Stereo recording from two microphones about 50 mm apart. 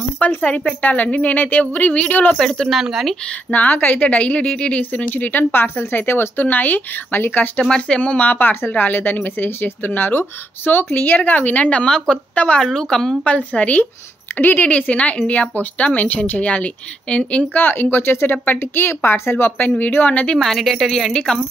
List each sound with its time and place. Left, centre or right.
0.2 s speech: left
2.3 s speech: centre
2.7 s a woman's voice: centre
3.5 s a woman's voice: left
5.1 s speech: left
7.6 s a woman's voice: centre
12.6 s speech: centre
13.2 s a woman's voice: left
17.6 s speech: left
19.8 s speech: left
20.3 s a woman's voice: centre